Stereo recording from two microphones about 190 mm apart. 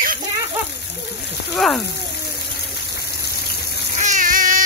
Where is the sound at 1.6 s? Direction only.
5° left (ahead or behind).